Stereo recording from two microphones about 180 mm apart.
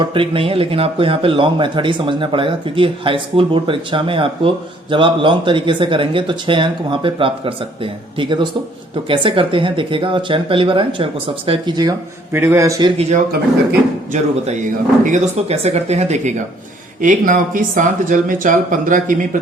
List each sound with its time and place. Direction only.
0.0 s a man's voice: 30° right (ahead or behind)
13.0 s speech: 40° right (ahead or behind)